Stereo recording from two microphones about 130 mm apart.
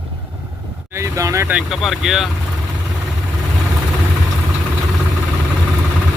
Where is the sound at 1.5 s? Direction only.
5° right (ahead or behind).